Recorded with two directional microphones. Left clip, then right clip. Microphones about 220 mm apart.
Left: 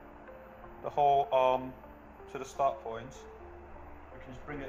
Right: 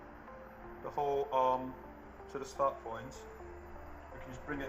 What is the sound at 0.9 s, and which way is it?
Speech, 45° left (ahead or behind).